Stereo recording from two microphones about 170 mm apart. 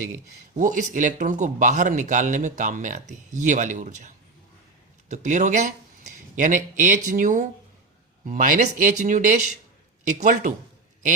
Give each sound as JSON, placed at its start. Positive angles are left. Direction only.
{"t": 0.5, "sound": "speech", "side_deg": -50}